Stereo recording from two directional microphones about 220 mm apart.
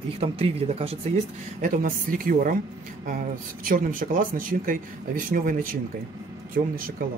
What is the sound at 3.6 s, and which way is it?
Speech, 40° right (ahead or behind).